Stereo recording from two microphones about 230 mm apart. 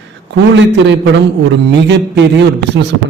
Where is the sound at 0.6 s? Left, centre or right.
Right.